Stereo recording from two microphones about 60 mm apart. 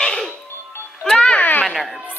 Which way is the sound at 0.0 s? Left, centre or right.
Centre.